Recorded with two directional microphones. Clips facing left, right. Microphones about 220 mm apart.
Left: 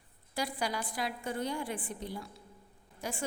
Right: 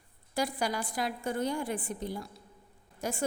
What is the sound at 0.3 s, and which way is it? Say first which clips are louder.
A woman's voice: right 3 dB; 45° right (ahead or behind).